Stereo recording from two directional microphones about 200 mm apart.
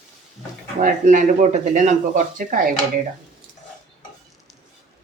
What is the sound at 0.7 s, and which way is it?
Speech, 40° right (ahead or behind).